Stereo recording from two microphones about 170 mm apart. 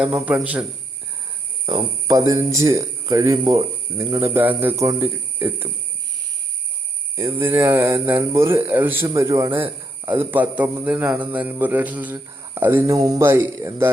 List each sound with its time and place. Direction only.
0.0 s speech: 10° right (ahead or behind)
1.6 s speech: 25° right (ahead or behind)
7.2 s speech: 15° right (ahead or behind)